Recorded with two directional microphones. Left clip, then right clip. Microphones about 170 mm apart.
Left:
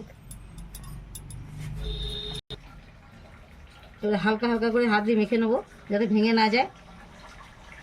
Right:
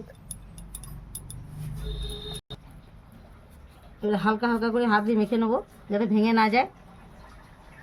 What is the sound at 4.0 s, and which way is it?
Speech, 10° right (ahead or behind).